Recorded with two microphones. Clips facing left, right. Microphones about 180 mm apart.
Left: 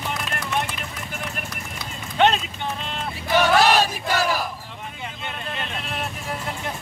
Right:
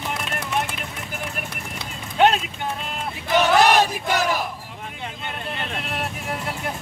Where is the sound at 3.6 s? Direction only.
20° right (ahead or behind).